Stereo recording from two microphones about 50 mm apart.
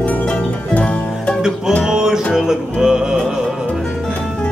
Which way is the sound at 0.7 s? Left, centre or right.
Left.